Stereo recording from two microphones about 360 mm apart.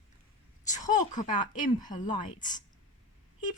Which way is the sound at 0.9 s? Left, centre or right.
Left.